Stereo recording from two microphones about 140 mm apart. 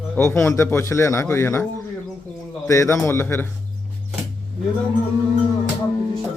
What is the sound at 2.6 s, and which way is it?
Speech, 20° left (ahead or behind).